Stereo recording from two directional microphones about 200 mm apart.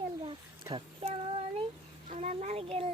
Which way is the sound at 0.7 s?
25° right (ahead or behind).